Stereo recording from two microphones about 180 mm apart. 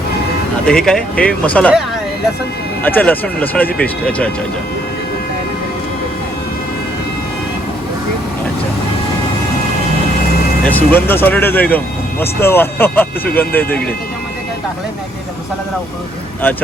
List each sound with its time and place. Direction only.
0.7 s speech: 5° left (ahead or behind)
2.8 s speech: 10° left (ahead or behind)
10.6 s speech: 10° left (ahead or behind)
16.4 s speech: 10° left (ahead or behind)